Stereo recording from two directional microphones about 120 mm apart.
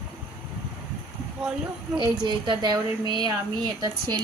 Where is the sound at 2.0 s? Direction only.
40° right (ahead or behind).